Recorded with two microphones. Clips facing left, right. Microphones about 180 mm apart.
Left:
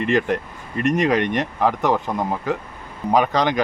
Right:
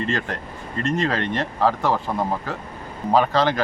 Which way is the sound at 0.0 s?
15° left (ahead or behind).